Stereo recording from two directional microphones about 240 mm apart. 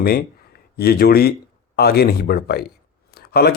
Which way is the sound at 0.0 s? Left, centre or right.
Left.